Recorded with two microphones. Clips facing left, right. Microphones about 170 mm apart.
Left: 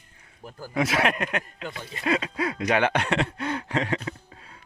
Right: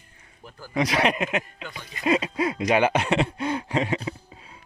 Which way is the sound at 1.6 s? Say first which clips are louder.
Left 3 dB; 30° left (ahead or behind).